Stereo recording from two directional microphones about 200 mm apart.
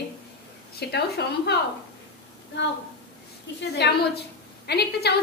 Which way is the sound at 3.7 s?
55° left (ahead or behind).